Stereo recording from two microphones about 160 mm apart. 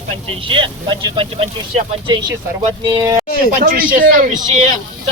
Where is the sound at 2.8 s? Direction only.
30° right (ahead or behind).